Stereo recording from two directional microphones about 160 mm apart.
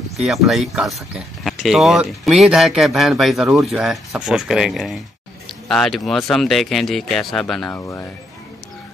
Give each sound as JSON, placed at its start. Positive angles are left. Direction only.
{"t": 0.2, "sound": "speech", "side_deg": 0}
{"t": 7.7, "sound": "speech", "side_deg": 15}